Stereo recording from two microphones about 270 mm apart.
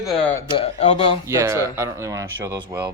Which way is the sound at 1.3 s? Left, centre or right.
Centre.